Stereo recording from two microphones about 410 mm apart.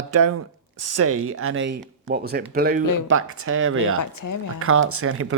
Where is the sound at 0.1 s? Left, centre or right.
Right.